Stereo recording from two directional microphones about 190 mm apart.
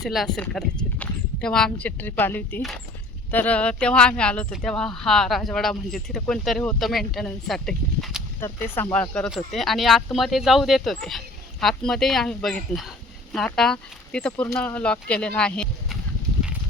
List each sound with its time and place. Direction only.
0.0 s speech: centre (ahead or behind)
8.4 s speech: 10° left (ahead or behind)